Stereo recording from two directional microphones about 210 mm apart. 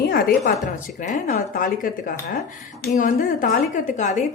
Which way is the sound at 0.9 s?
40° left (ahead or behind).